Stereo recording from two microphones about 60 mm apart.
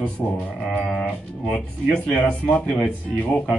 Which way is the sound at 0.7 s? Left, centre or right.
Centre.